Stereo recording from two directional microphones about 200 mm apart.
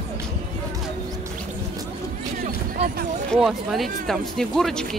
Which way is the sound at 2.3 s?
45° right (ahead or behind).